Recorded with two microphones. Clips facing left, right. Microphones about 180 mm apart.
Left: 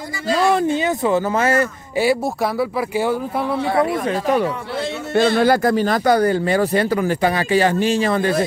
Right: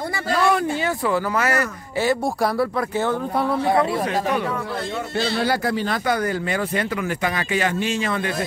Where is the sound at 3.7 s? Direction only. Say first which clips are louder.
Left 2 dB; 20° right (ahead or behind).